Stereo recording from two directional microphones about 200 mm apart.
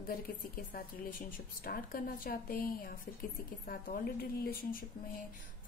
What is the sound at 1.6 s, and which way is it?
Speech, 45° left (ahead or behind).